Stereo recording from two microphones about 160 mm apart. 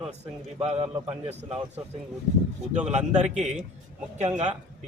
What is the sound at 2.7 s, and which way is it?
Speech, 45° right (ahead or behind).